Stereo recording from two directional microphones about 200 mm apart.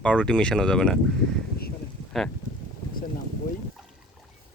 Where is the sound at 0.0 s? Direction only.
5° left (ahead or behind).